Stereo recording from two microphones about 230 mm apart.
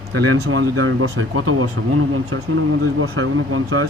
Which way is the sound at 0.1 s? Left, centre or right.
Right.